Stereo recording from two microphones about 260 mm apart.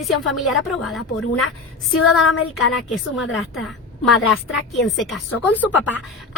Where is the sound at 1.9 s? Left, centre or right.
Left.